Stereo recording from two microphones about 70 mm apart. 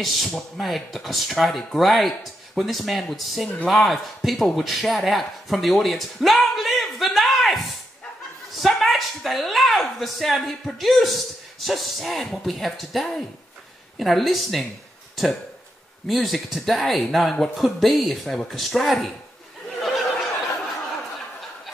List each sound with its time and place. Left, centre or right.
0.0 s speech: centre
16.1 s speech: centre
19.8 s a sound: centre